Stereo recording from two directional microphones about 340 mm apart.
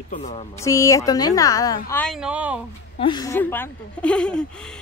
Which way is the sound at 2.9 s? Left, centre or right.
Centre.